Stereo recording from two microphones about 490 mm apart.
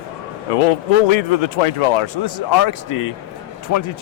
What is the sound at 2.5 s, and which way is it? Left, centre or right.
Speech, left.